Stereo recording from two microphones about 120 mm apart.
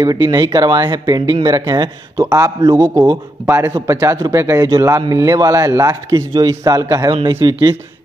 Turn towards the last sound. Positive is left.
turn(degrees=-40)  # may be behind; listen again after turning